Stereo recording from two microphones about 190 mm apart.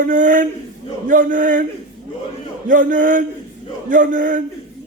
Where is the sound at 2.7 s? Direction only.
45° right (ahead or behind).